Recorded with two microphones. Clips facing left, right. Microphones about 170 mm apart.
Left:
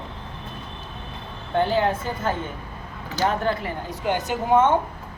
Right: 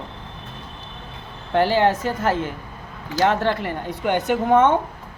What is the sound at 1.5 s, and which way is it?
A woman's voice, 85° right.